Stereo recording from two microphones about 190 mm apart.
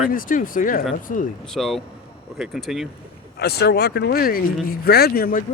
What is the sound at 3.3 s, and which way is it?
Speech, 60° left (ahead or behind).